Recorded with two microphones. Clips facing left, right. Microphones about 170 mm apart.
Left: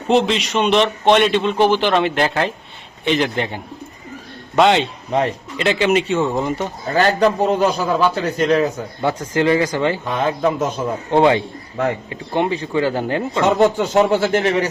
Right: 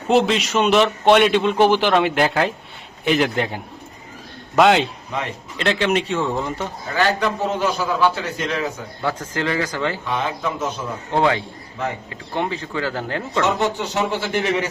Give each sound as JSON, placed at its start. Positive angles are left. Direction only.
{"t": 0.1, "sound": "a man's voice", "side_deg": 0}
{"t": 6.9, "sound": "a man's voice", "side_deg": 40}
{"t": 9.0, "sound": "speech", "side_deg": 20}
{"t": 10.1, "sound": "speech", "side_deg": 45}
{"t": 11.1, "sound": "speech", "side_deg": 20}
{"t": 13.6, "sound": "speech", "side_deg": 45}